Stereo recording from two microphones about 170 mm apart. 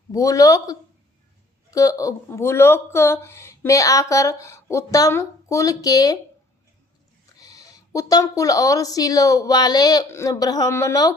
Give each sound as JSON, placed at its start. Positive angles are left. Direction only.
{"t": 0.1, "sound": "speech", "side_deg": 20}
{"t": 7.3, "sound": "speech", "side_deg": 20}